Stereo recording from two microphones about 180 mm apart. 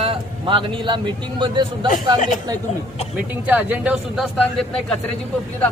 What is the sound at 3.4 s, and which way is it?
A man's voice, 10° right (ahead or behind).